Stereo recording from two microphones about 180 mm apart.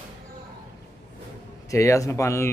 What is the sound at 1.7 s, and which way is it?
Speech, 15° left (ahead or behind).